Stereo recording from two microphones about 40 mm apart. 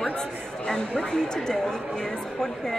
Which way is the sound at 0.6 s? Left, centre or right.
Centre.